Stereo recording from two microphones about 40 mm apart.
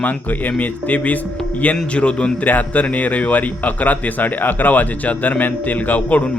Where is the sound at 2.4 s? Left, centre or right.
Left.